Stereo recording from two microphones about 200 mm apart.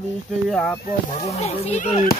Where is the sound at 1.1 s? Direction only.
30° left (ahead or behind).